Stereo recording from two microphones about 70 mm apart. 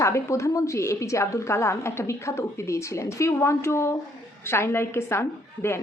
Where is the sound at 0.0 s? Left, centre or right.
Left.